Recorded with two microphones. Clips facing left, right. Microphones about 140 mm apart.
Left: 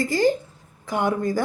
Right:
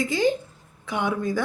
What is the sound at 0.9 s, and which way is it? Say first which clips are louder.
Speech: left 3 dB; 45° left (ahead or behind).